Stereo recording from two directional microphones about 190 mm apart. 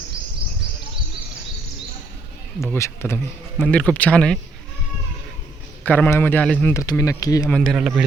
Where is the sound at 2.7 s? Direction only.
15° left (ahead or behind).